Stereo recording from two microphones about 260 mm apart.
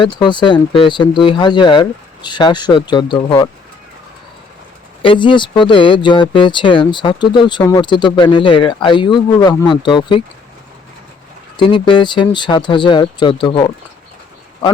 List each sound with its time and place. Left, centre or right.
0.0 s speech: centre
5.0 s speech: centre
11.5 s speech: centre